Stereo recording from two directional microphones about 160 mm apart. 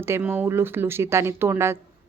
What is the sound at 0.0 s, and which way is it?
A woman's voice, 15° right (ahead or behind).